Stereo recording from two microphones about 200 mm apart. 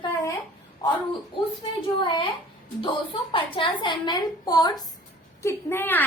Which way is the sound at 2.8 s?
25° left (ahead or behind).